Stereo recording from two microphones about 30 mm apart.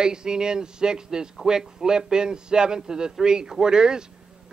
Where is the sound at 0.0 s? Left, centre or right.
Right.